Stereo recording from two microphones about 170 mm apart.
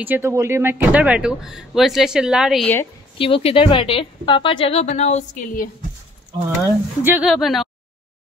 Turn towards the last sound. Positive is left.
turn(degrees=0)  # may be behind; listen again after turning